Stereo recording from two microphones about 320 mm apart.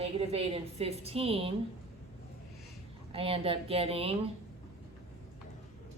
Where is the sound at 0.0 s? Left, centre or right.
Centre.